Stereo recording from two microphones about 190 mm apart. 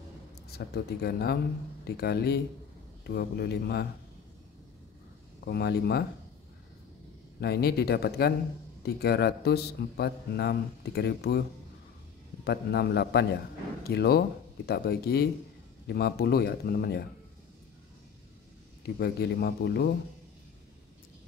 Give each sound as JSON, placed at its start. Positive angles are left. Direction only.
{"t": 0.5, "sound": "a man's voice", "side_deg": 60}
{"t": 5.4, "sound": "a man's voice", "side_deg": 60}
{"t": 7.3, "sound": "a man's voice", "side_deg": 60}
{"t": 12.4, "sound": "a man's voice", "side_deg": 60}
{"t": 18.9, "sound": "a man's voice", "side_deg": 60}